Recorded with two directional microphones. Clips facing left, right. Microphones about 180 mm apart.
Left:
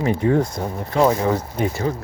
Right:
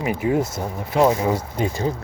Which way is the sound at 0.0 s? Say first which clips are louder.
Left 3 dB; 10° right (ahead or behind).